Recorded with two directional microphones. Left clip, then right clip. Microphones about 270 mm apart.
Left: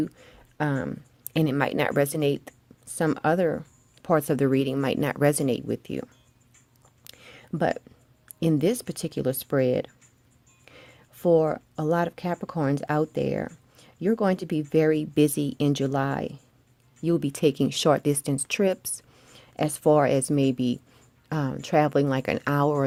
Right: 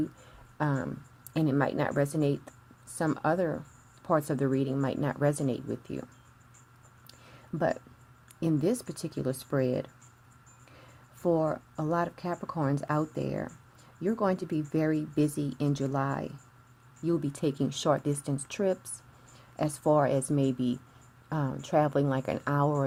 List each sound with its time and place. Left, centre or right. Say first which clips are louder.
0.2 s speech: left 4 dB; left
7.1 s a sound: left 5 dB; left
8.4 s speech: left 5 dB; left